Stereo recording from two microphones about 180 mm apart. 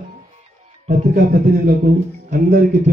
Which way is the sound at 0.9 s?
55° right (ahead or behind).